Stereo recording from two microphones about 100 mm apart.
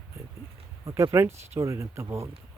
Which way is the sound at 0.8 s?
30° right (ahead or behind).